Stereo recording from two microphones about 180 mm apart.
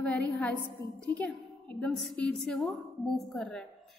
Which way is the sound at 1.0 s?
5° left (ahead or behind).